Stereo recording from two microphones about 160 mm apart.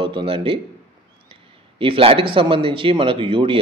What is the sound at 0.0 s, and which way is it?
A man's voice, 35° right (ahead or behind).